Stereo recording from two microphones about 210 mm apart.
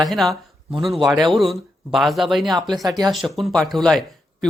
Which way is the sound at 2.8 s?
20° right (ahead or behind).